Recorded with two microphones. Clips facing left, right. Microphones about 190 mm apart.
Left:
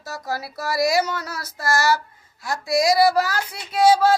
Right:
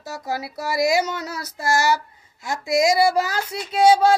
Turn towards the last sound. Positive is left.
turn(degrees=-25)  # may be behind; listen again after turning